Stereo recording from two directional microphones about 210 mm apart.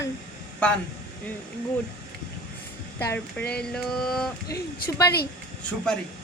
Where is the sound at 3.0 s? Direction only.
10° left (ahead or behind).